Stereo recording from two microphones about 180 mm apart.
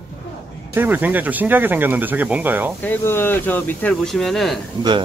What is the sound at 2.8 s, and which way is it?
Speech, 10° left (ahead or behind).